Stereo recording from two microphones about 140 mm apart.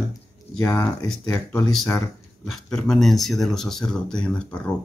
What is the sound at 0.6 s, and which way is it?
Speech, 25° left (ahead or behind).